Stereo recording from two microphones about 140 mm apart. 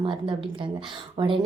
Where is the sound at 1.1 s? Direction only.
40° right (ahead or behind).